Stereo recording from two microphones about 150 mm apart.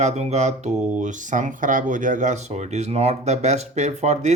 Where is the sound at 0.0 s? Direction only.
45° right (ahead or behind).